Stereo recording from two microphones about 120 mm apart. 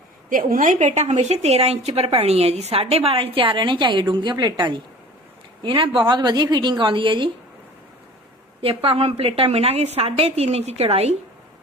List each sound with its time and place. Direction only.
0.6 s a woman's voice: 90° right; by 7.3 s 45° right (ahead or behind)
8.6 s speech: 50° right (ahead or behind)